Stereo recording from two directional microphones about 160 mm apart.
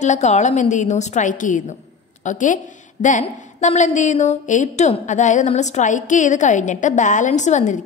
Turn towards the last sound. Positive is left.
turn(degrees=50)  # may be behind; listen again after turning